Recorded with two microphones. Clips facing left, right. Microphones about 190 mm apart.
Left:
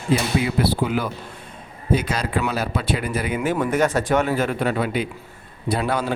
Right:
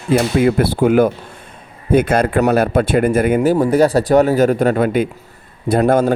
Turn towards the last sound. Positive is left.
turn(degrees=-45)  # may be behind; listen again after turning